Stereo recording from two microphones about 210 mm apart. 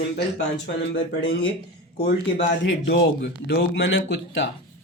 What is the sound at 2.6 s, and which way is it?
Speech, 60° left (ahead or behind).